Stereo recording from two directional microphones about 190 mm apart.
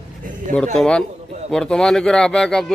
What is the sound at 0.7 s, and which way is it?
Speech, 5° left (ahead or behind).